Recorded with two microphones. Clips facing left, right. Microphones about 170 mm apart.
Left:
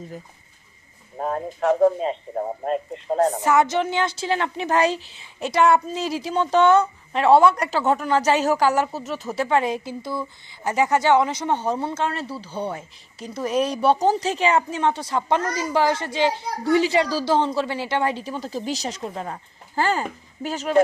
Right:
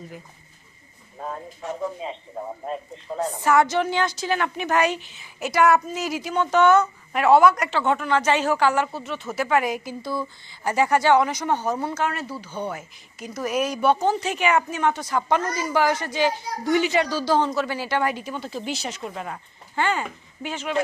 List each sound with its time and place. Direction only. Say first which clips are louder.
1.2 s speech: left 9 dB; 60° left (ahead or behind)
2.0 s a man's voice: left 7 dB; 45° left (ahead or behind)
3.4 s a woman's voice: even; 20° left (ahead or behind); by 20.8 s 40° left (ahead or behind)